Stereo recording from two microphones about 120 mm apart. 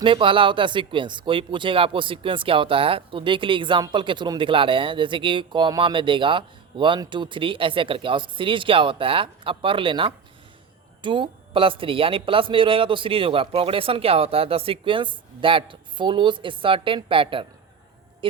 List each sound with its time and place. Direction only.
0.0 s speech: 45° right (ahead or behind)